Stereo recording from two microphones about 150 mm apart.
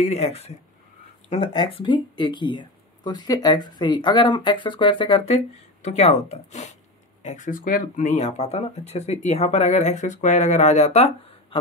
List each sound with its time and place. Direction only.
0.0 s speech: 45° left (ahead or behind)
1.3 s speech: 35° left (ahead or behind)